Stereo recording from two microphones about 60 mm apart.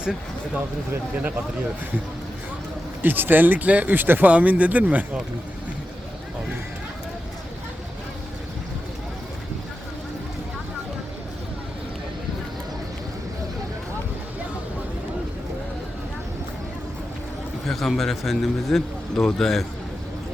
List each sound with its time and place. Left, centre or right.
3.0 s speech: right
4.3 s speech: right
17.7 s a man's voice: centre